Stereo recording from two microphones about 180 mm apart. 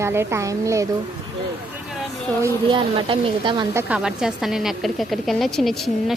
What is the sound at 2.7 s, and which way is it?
Speech, 25° right (ahead or behind).